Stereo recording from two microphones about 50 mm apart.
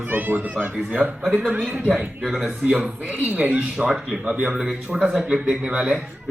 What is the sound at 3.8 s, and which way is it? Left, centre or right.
Speech, centre.